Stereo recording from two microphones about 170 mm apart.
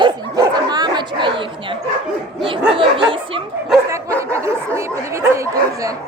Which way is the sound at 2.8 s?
30° right (ahead or behind).